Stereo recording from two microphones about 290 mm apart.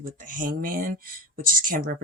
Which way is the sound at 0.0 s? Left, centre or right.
Right.